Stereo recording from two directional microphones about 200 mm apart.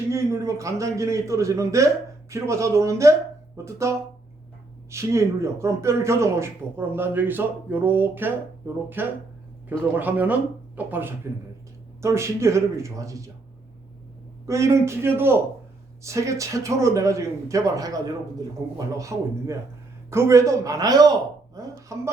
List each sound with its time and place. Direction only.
0.1 s a man's voice: 15° right (ahead or behind)
14.4 s a man's voice: 15° right (ahead or behind)